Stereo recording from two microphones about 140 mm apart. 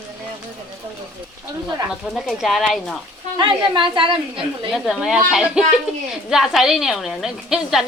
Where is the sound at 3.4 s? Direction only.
35° right (ahead or behind).